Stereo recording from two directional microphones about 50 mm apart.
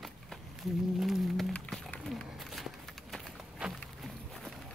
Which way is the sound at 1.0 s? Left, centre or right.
Centre.